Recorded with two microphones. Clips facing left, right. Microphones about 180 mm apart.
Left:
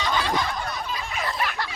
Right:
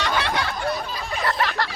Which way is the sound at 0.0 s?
70° right (ahead or behind).